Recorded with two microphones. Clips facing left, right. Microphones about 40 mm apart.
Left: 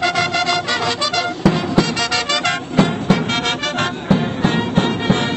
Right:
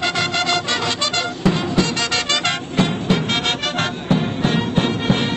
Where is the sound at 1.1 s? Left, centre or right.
Left.